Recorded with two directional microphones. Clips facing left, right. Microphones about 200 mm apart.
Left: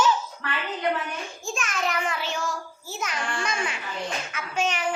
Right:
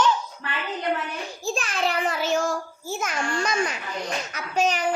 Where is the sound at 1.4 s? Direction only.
35° right (ahead or behind).